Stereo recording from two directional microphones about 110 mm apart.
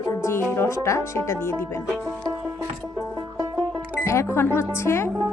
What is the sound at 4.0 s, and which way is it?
Speech, 25° left (ahead or behind).